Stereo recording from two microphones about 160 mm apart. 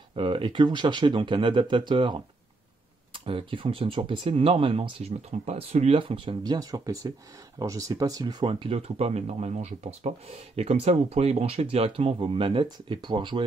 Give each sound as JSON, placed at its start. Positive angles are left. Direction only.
{"t": 0.1, "sound": "speech", "side_deg": -30}